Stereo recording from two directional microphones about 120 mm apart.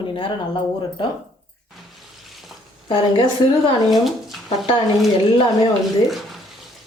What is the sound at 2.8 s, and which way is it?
Speech, 40° left (ahead or behind).